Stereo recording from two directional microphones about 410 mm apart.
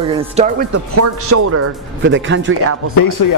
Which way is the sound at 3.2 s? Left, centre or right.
Left.